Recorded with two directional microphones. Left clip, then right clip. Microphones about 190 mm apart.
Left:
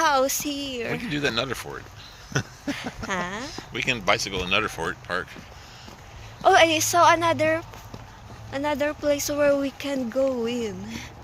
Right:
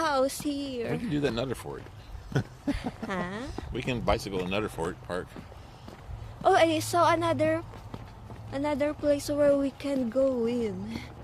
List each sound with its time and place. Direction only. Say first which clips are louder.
0.0 s speech: left 5 dB; centre (ahead or behind)
1.1 s speech: left 5 dB; 20° right (ahead or behind)
2.6 s speech: left 4 dB; 5° right (ahead or behind)
3.5 s speech: left 7 dB; 30° right (ahead or behind)
6.4 s speech: left 5 dB; centre (ahead or behind)